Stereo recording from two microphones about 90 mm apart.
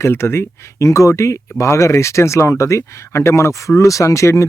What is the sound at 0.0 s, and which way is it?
Speech, 30° left (ahead or behind).